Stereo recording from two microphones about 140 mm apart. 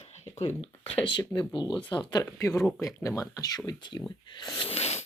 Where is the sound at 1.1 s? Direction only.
35° left (ahead or behind).